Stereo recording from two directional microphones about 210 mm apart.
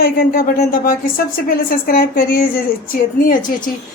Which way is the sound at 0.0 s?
45° left (ahead or behind).